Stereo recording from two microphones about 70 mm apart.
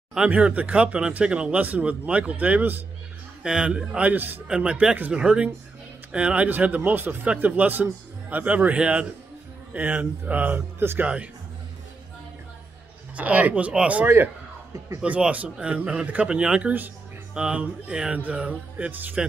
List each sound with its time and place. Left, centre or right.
0.3 s a man's voice: right
3.4 s a man's voice: centre; by 11.1 s right
13.1 s a man's voice: right
15.0 s a man's voice: centre